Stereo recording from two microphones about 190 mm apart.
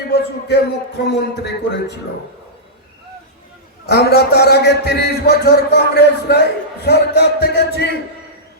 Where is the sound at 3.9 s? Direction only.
60° left (ahead or behind).